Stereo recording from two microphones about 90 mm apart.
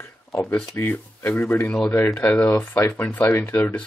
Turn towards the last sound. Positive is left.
turn(degrees=30)  # may be behind; listen again after turning